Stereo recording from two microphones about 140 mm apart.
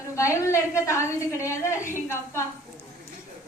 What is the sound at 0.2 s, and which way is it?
A woman's voice, 20° left (ahead or behind).